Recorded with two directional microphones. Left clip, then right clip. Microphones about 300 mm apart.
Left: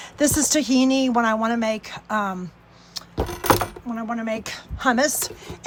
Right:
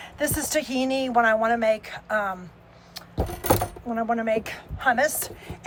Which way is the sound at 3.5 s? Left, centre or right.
Centre.